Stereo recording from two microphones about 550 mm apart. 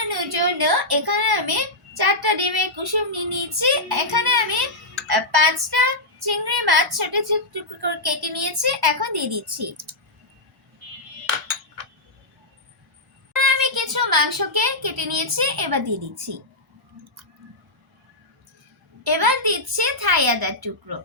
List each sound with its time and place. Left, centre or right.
0.1 s speech: right
5.0 s a sound: right
13.4 s a child's voice: right
19.0 s speech: right